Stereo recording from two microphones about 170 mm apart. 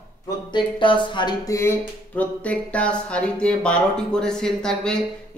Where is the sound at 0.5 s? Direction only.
30° left (ahead or behind).